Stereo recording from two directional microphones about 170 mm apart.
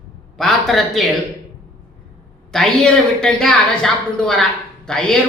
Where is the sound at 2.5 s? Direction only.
5° left (ahead or behind).